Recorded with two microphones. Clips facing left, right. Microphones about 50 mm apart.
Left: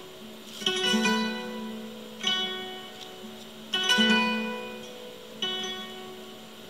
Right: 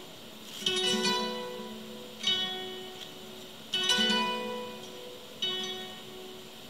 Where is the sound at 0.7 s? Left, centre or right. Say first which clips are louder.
Left 4 dB; left.